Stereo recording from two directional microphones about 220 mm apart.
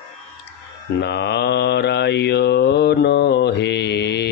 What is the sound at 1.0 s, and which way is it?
Mantra, 50° left (ahead or behind).